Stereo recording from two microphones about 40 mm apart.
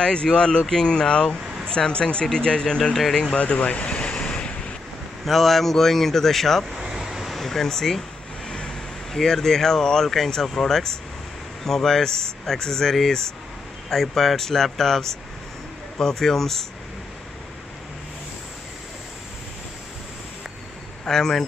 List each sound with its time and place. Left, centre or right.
0.0 s speech: left
3.3 s vehicle: left
5.2 s speech: centre
6.7 s vehicle: centre
7.3 s speech: centre
8.5 s vehicle: left
9.1 s speech: centre
21.1 s speech: centre